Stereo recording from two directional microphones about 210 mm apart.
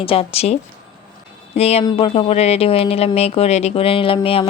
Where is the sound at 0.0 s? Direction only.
25° left (ahead or behind).